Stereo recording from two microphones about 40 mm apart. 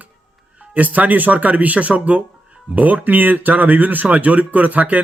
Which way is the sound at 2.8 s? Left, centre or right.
Right.